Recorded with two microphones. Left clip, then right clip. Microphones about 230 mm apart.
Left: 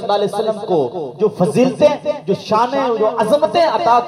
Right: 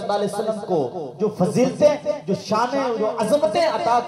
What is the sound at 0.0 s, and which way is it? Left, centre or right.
A man's voice, left.